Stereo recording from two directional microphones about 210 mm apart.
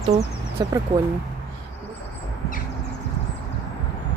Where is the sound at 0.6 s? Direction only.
15° right (ahead or behind).